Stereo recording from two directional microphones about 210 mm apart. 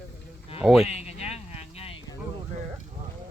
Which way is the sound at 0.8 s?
30° left (ahead or behind).